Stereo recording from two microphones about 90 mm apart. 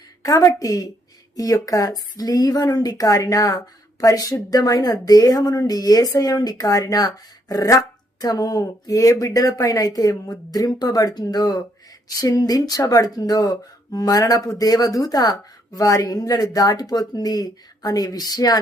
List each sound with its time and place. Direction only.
0.2 s a woman's voice: 40° left (ahead or behind)